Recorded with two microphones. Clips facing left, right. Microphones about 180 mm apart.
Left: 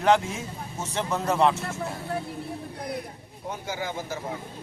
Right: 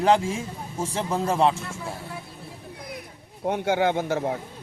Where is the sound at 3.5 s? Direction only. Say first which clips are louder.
Right 10 dB; 70° right (ahead or behind).